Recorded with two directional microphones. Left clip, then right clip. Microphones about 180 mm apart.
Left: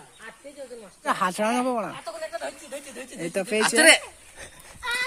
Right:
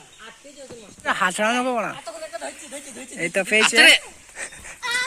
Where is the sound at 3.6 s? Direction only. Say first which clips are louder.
Right 3 dB; 40° left (ahead or behind).